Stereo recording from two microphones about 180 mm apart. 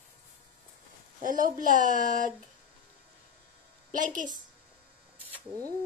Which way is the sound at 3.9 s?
45° right (ahead or behind).